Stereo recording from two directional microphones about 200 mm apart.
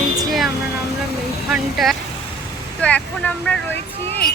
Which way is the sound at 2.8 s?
5° left (ahead or behind).